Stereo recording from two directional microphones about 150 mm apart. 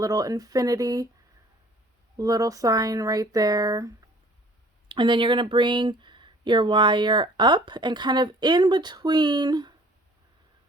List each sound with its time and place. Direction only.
0.0 s speech: 25° right (ahead or behind)
2.1 s speech: 25° right (ahead or behind)